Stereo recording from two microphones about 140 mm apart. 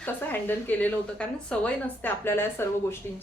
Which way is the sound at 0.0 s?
15° left (ahead or behind).